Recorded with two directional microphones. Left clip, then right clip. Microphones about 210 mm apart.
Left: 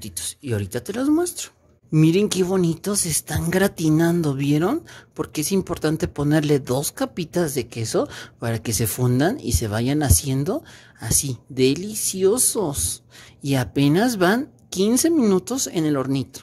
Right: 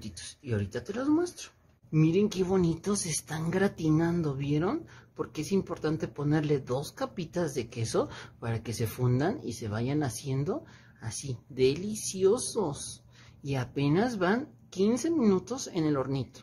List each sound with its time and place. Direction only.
0.0 s speech: 35° left (ahead or behind)